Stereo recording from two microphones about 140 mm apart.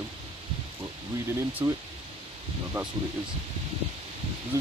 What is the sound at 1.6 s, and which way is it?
Speech, 20° right (ahead or behind).